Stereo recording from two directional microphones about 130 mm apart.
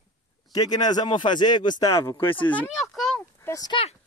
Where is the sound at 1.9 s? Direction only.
20° left (ahead or behind).